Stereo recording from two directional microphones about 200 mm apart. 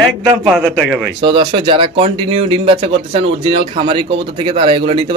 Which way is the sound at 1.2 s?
25° right (ahead or behind).